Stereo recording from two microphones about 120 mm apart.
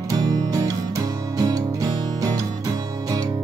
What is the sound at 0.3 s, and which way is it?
Music, 30° right (ahead or behind).